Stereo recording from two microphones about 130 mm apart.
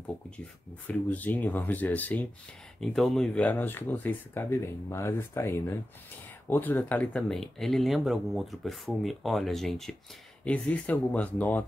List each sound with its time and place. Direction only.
0.8 s speech: 10° left (ahead or behind)